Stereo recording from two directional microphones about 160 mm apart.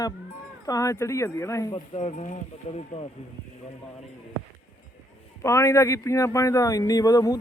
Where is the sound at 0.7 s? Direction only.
20° left (ahead or behind).